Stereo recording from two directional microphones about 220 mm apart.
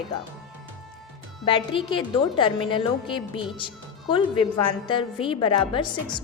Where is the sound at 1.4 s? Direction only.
25° left (ahead or behind).